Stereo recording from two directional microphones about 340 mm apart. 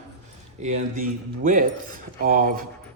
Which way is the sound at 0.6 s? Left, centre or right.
Right.